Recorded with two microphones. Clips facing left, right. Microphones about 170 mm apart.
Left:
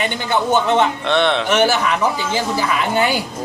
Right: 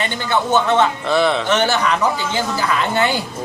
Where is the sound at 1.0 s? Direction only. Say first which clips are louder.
Even; 5° right (ahead or behind).